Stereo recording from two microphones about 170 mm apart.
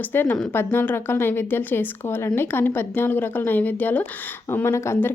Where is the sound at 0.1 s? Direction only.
10° left (ahead or behind).